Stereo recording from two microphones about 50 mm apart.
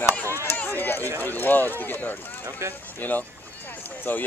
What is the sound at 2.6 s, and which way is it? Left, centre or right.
Speech, right.